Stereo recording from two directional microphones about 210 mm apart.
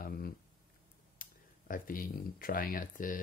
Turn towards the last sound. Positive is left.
turn(degrees=40)  # may be behind; listen again after turning